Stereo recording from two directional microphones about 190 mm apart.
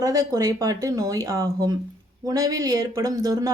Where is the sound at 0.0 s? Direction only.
20° right (ahead or behind).